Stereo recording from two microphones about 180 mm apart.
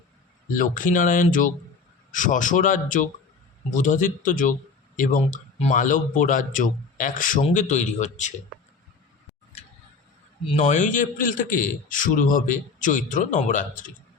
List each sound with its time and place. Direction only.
0.5 s a man's voice: 50° left (ahead or behind)
10.5 s a man's voice: 40° left (ahead or behind)